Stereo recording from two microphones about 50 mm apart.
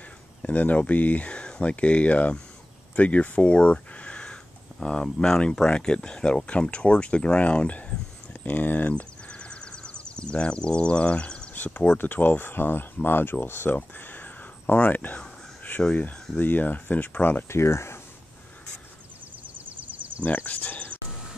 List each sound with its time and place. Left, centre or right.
0.4 s speech: left
8.3 s speech: left
9.3 s a sound: centre
11.5 s a sound: left
12.0 s speech: left
13.7 s a sound: left
15.8 s speech: left
17.5 s speech: left
20.2 s speech: left